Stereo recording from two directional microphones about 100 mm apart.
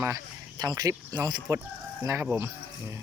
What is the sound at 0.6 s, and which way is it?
Speech, 40° right (ahead or behind).